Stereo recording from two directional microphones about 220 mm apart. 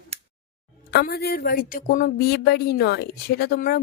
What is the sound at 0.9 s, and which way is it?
Speech, 45° left (ahead or behind).